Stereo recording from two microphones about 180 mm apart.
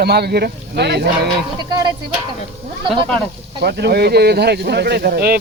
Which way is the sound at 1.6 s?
25° right (ahead or behind).